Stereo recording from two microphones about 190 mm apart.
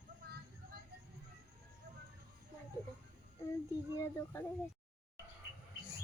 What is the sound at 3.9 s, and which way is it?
Speech, 15° left (ahead or behind).